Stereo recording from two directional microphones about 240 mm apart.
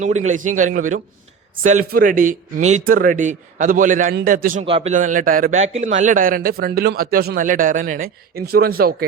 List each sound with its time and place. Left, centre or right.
0.0 s speech: right
4.6 s speech: right